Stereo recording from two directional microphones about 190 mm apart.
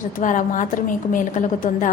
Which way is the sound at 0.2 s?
40° left (ahead or behind).